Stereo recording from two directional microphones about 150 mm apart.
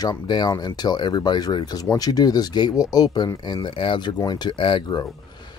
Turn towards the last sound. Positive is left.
turn(degrees=30)  # may be behind; listen again after turning